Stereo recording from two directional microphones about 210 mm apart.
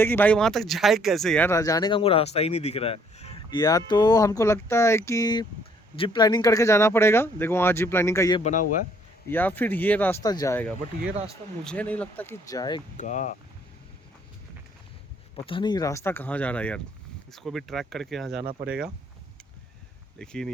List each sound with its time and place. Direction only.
0.0 s speech: 10° left (ahead or behind)
8.4 s a man's voice: 35° left (ahead or behind)
9.3 s speech: 10° left (ahead or behind)
13.0 s a man's voice: 35° left (ahead or behind)
15.4 s speech: 20° left (ahead or behind); by 18.4 s centre (ahead or behind)
20.1 s speech: 5° left (ahead or behind)